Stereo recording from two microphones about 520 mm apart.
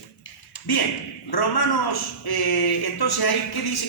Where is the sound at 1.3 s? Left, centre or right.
Left.